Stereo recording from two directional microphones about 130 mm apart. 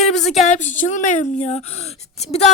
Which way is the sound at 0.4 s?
65° left (ahead or behind).